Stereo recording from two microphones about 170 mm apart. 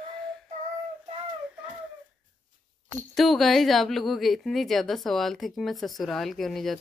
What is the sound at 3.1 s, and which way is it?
Speech, centre (ahead or behind).